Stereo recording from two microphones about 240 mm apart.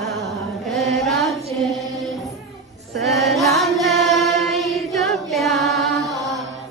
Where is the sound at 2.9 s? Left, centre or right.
Centre.